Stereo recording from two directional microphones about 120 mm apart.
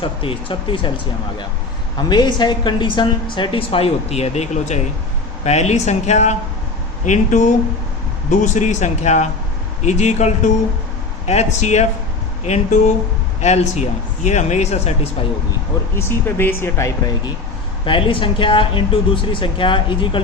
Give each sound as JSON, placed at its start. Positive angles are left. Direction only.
{"t": 0.0, "sound": "a woman's voice", "side_deg": 50}
{"t": 7.0, "sound": "speech", "side_deg": 90}
{"t": 16.0, "sound": "speech", "side_deg": 20}
{"t": 17.8, "sound": "a woman's voice", "side_deg": 45}